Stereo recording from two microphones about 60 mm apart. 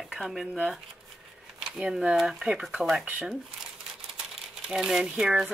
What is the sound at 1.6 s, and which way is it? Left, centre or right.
Speech, centre.